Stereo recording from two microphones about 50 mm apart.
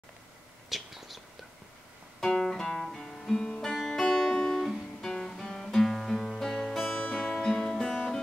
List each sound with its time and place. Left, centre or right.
0.7 s a sound: centre
2.1 s guitar: centre
3.6 s music: centre
6.9 s music: left
7.3 s guitar: centre